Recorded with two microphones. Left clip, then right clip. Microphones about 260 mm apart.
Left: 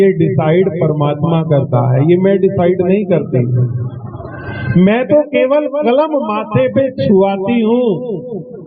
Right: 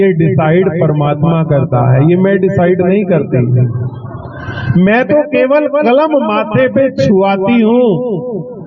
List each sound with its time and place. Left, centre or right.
0.0 s a man's voice: right
4.8 s a man's voice: right